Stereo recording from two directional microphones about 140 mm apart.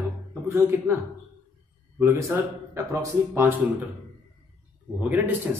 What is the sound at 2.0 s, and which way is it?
Speech, 15° right (ahead or behind).